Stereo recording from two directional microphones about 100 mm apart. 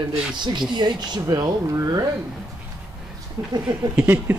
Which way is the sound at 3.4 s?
40° right (ahead or behind).